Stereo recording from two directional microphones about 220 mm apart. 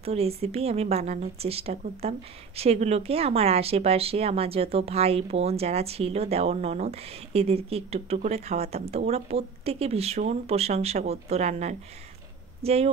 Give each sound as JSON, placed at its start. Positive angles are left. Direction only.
{"t": 0.0, "sound": "speech", "side_deg": -30}